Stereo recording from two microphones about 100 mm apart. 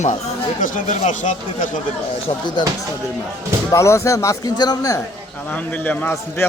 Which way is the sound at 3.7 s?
30° left (ahead or behind).